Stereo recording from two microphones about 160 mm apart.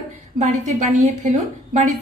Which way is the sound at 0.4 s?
50° right (ahead or behind).